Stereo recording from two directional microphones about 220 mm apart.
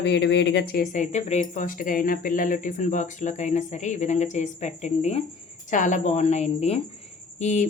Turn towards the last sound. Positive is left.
turn(degrees=30)  # may be behind; listen again after turning